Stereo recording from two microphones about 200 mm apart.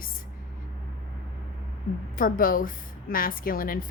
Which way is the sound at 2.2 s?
45° left (ahead or behind).